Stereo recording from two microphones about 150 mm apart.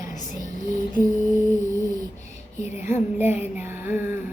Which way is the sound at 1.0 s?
20° right (ahead or behind).